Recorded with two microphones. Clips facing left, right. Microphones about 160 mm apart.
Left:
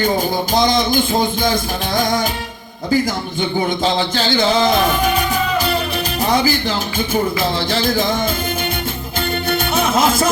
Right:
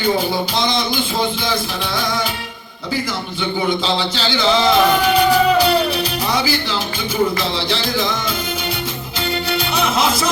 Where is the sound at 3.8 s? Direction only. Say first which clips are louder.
Left 3 dB; 50° left (ahead or behind).